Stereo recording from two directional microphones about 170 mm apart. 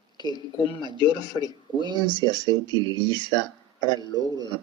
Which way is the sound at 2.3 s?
25° right (ahead or behind).